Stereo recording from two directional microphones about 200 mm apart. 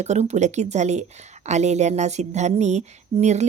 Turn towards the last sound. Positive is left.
turn(degrees=-35)  # may be behind; listen again after turning